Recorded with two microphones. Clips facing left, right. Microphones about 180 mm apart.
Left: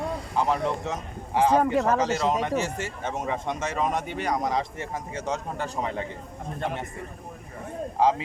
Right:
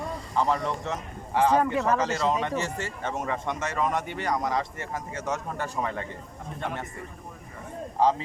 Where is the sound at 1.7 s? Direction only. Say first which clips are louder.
Left 2 dB; 45° left (ahead or behind).